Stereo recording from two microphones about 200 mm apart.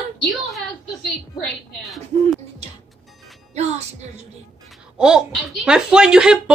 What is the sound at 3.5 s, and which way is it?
Music, 35° right (ahead or behind).